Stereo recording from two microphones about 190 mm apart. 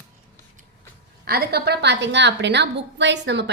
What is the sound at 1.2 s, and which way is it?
A woman's voice, 55° right (ahead or behind).